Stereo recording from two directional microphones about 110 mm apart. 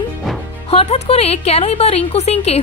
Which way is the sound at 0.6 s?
70° left (ahead or behind).